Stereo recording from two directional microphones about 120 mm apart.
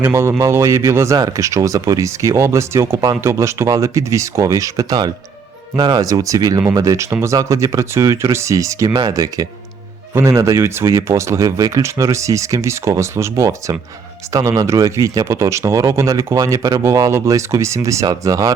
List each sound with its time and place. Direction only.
0.0 s speech: 20° right (ahead or behind)
18.0 s speech: 35° right (ahead or behind)